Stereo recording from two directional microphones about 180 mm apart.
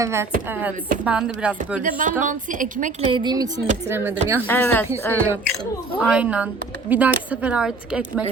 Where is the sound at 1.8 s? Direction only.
45° right (ahead or behind).